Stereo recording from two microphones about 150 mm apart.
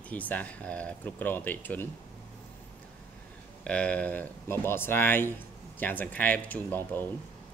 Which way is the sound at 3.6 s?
10° left (ahead or behind).